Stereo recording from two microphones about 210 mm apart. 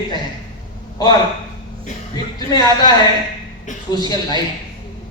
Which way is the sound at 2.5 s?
20° left (ahead or behind).